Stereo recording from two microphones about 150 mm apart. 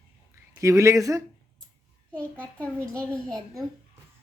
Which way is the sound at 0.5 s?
20° right (ahead or behind).